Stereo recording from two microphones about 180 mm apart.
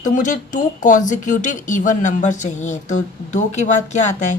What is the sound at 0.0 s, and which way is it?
Speech, 45° left (ahead or behind).